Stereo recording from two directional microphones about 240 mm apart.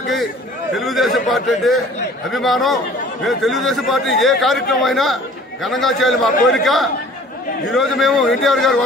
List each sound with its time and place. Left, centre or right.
0.7 s a man's voice: centre